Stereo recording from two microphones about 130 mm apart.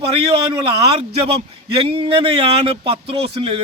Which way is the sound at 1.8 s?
45° right (ahead or behind).